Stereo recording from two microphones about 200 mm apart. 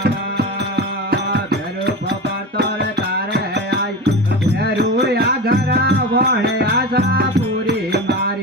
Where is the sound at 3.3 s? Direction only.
55° right (ahead or behind).